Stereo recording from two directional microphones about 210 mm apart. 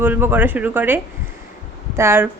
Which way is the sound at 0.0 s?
10° right (ahead or behind).